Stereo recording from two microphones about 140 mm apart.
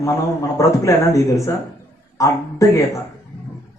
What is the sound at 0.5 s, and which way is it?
Speech, 25° left (ahead or behind).